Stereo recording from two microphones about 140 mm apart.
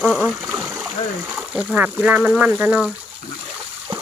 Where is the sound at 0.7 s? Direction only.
Centre (ahead or behind).